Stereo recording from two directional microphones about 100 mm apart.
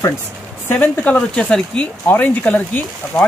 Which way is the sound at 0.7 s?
15° left (ahead or behind).